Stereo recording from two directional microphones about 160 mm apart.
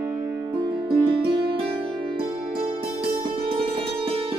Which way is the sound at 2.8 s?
30° right (ahead or behind).